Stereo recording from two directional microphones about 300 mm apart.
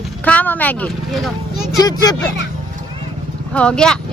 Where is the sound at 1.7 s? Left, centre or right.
Centre.